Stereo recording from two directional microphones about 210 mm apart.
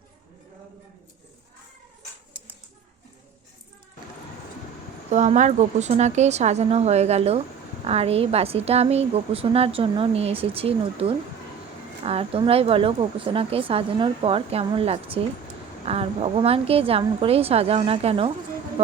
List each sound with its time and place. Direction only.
5.1 s a woman's voice: 35° right (ahead or behind)